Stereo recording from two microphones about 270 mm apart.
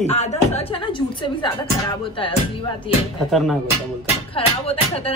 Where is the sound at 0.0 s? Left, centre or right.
Left.